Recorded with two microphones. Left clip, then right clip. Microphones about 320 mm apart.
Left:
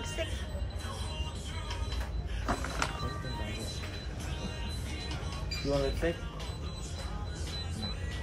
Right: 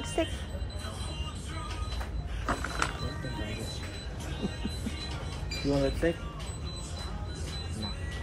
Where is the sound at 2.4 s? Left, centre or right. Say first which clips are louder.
Right 2 dB; centre.